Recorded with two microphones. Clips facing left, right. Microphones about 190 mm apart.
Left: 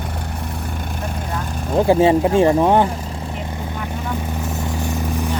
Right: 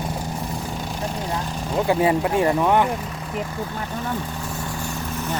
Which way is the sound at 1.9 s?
25° left (ahead or behind).